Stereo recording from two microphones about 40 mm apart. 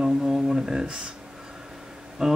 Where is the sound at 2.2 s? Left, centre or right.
Centre.